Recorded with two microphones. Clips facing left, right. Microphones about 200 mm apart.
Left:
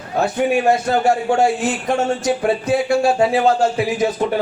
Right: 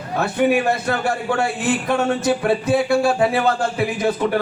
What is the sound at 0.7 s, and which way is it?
Speech, 60° right (ahead or behind).